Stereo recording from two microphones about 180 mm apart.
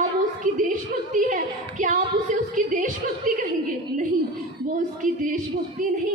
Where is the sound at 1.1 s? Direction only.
45° right (ahead or behind).